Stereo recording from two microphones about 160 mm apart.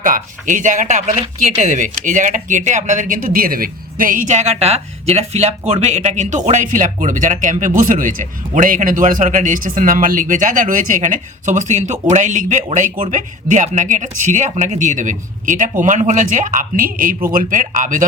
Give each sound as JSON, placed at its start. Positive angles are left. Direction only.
{"t": 0.0, "sound": "speech", "side_deg": -55}